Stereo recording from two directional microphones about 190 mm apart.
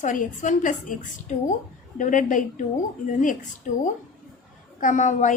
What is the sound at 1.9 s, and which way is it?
Speech, 40° left (ahead or behind).